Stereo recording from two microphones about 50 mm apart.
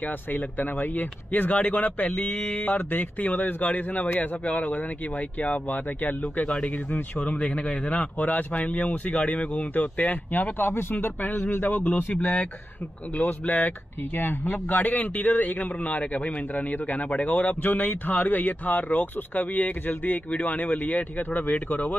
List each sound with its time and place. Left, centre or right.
0.0 s a man's voice: left
6.9 s a man's voice: left
10.7 s a man's voice: left